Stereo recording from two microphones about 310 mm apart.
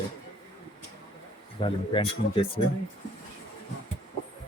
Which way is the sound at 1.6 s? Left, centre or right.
Centre.